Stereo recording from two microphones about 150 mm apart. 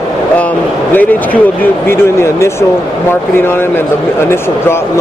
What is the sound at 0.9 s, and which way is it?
Speech, 10° left (ahead or behind).